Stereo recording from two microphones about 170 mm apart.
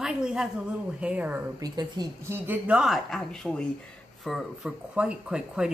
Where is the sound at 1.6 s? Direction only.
25° right (ahead or behind).